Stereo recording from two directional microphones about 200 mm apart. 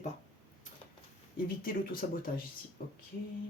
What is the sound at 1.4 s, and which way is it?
Speech, 45° left (ahead or behind).